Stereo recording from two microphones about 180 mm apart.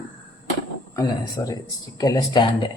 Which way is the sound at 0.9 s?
20° left (ahead or behind).